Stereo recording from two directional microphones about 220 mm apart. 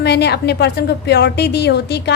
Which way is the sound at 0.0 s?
50° left (ahead or behind).